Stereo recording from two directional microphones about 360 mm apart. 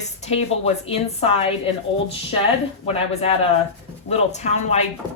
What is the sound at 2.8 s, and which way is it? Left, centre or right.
A woman's voice, centre.